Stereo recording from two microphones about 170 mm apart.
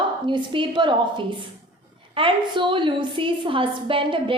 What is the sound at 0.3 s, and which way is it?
A woman's voice, 30° right (ahead or behind).